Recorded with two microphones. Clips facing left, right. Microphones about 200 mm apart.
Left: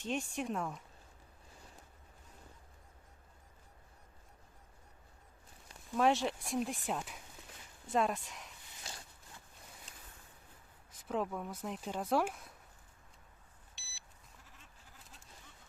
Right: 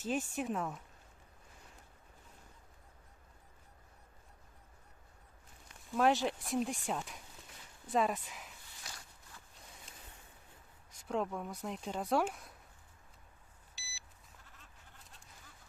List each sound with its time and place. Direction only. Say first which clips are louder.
0.0 s speech: right 1 dB; 5° right (ahead or behind)
5.9 s speech: even; centre (ahead or behind)
8.8 s a sound: left 3 dB; 25° left (ahead or behind)
10.9 s speech: even; centre (ahead or behind)
13.7 s beep: right 2 dB; centre (ahead or behind)
14.4 s bleat: even; centre (ahead or behind)